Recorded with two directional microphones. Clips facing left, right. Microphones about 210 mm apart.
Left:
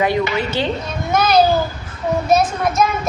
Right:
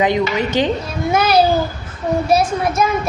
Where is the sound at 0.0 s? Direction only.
15° right (ahead or behind).